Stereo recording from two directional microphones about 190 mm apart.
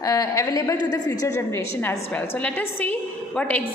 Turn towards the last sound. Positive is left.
turn(degrees=5)  # may be behind; listen again after turning